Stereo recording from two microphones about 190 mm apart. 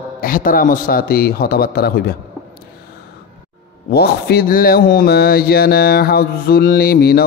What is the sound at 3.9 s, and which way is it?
A man's voice, 55° left (ahead or behind).